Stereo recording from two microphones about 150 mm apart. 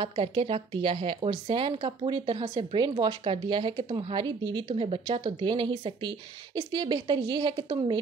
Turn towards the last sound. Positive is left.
turn(degrees=-30)  # may be behind; listen again after turning